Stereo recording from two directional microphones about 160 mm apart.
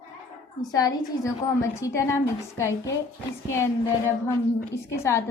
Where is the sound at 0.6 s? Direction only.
20° left (ahead or behind).